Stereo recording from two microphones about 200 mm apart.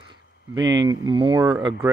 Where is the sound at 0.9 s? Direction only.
25° right (ahead or behind).